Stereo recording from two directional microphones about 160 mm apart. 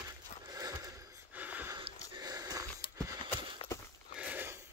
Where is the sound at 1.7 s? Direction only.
30° right (ahead or behind).